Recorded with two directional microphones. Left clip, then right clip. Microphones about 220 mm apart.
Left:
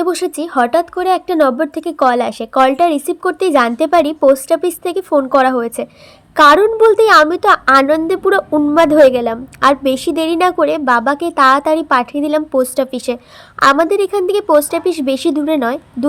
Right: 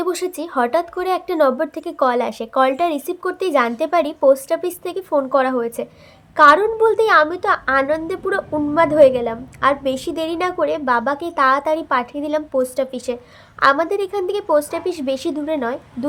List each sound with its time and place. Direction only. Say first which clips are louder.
0.0 s a woman's voice: left 5 dB; 25° left (ahead or behind)